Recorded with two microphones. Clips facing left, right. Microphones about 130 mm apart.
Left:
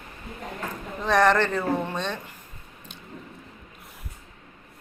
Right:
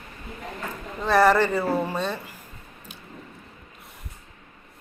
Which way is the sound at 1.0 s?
5° right (ahead or behind).